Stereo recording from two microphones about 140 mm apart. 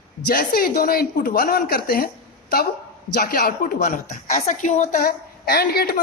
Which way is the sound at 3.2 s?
90° left.